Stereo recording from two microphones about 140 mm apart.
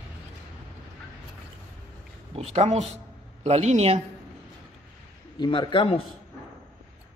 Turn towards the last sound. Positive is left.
turn(degrees=35)  # may be behind; listen again after turning